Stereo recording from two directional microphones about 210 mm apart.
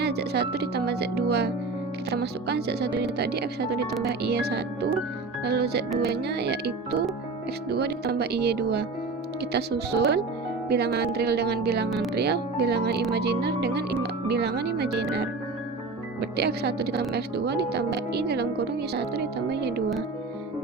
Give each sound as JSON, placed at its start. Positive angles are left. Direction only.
{"t": 0.0, "sound": "speech", "side_deg": -50}
{"t": 16.4, "sound": "speech", "side_deg": -50}